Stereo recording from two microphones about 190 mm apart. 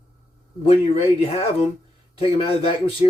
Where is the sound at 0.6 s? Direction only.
30° left (ahead or behind).